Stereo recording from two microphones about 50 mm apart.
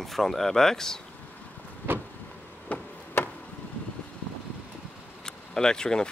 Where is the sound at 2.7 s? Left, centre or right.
Left.